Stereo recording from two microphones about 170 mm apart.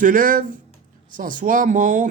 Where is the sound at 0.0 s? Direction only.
55° right (ahead or behind).